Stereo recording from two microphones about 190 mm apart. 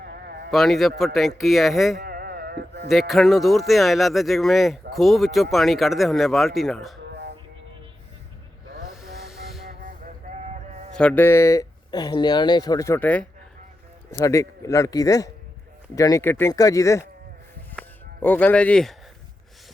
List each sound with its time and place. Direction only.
0.0 s sheep: 55° right (ahead or behind)
0.5 s speech: centre (ahead or behind)
2.0 s music: 50° right (ahead or behind)
2.9 s speech: centre (ahead or behind)
9.4 s a sound: centre (ahead or behind)
9.8 s a sound: 40° right (ahead or behind)
10.9 s speech: 5° left (ahead or behind)
17.7 s music: 10° left (ahead or behind)